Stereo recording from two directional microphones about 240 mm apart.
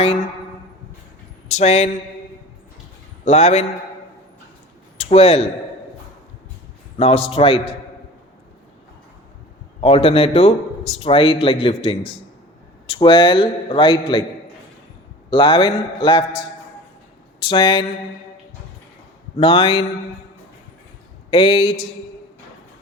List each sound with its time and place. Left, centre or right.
1.5 s a man's voice: left
3.2 s a man's voice: left
4.9 s speech: left
7.0 s a man's voice: left
9.8 s a man's voice: left
15.3 s a man's voice: left
17.4 s a man's voice: centre
19.4 s a man's voice: left
21.2 s a man's voice: left